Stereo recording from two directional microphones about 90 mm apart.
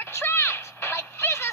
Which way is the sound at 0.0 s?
25° left (ahead or behind).